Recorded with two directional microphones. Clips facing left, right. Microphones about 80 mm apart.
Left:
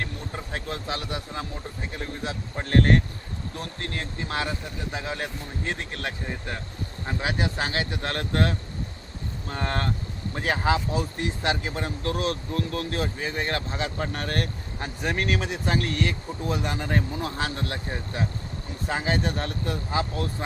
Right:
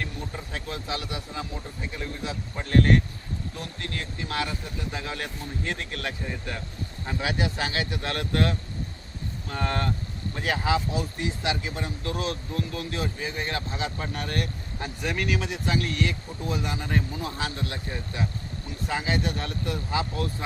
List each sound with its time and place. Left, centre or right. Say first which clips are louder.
0.5 s speech: left 2 dB; left